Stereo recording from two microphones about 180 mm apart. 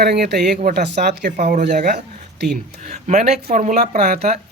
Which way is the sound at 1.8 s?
65° right (ahead or behind).